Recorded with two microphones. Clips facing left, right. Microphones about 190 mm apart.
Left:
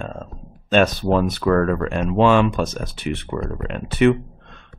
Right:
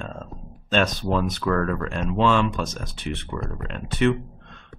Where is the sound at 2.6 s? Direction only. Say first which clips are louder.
Left 6 dB; 5° left (ahead or behind).